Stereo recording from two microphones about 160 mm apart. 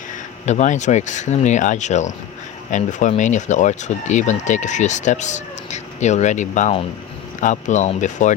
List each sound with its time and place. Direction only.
0.4 s speech: 45° left (ahead or behind)